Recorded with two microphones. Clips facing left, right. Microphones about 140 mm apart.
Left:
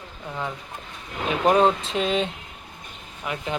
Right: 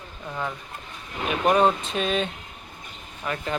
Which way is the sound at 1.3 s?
20° left (ahead or behind).